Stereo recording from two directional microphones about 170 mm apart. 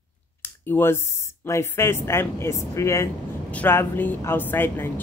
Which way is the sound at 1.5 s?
15° left (ahead or behind).